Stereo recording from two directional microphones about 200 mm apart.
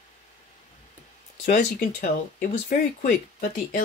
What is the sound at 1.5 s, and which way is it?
Speech, 45° left (ahead or behind).